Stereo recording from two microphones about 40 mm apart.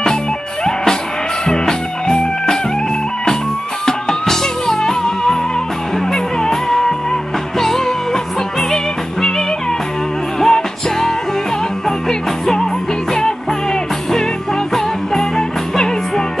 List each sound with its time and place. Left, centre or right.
1.5 s music: centre
3.8 s music: centre
10.4 s music: centre
14.7 s music: centre